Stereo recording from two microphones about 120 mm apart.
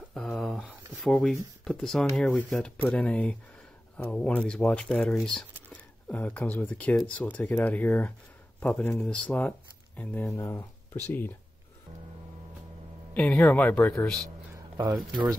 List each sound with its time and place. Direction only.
0.1 s speech: centre (ahead or behind); by 11.0 s 25° left (ahead or behind)
13.1 s speech: 15° left (ahead or behind)
14.5 s a sound: 20° right (ahead or behind)